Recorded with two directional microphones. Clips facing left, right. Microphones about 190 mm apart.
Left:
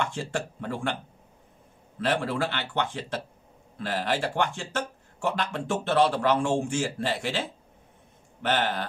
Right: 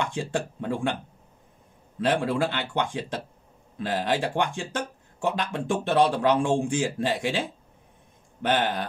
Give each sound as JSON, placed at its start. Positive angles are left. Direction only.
{"t": 0.0, "sound": "speech", "side_deg": -15}
{"t": 2.0, "sound": "speech", "side_deg": -15}